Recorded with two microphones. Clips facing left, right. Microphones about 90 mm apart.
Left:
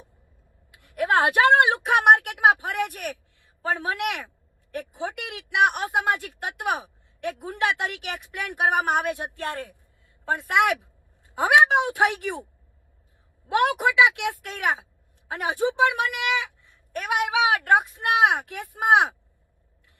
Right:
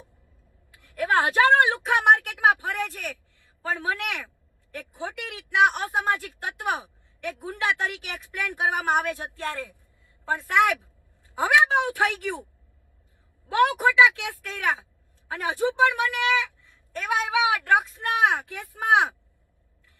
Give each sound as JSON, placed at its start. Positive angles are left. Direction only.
{"t": 0.7, "sound": "speech", "side_deg": 20}
{"t": 13.5, "sound": "a woman's voice", "side_deg": 20}